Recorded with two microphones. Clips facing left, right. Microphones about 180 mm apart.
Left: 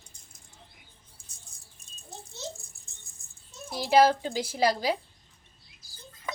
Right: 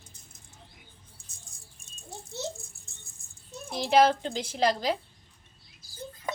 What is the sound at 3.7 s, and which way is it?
A woman's voice, 5° left (ahead or behind).